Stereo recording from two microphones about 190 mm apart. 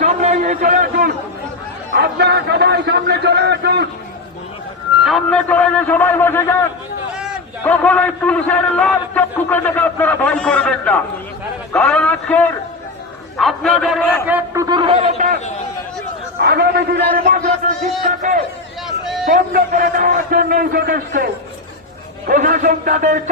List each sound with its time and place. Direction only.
0.0 s a sound: 40° right (ahead or behind)
2.0 s a man's voice: 60° right (ahead or behind)
5.0 s a man's voice: 5° left (ahead or behind)
7.1 s a sound: 5° right (ahead or behind)
7.6 s a man's voice: 10° left (ahead or behind)
14.3 s a man's voice: 15° right (ahead or behind); by 15.1 s 30° right (ahead or behind)
16.4 s a man's voice: 55° right (ahead or behind)
22.3 s a man's voice: 45° right (ahead or behind)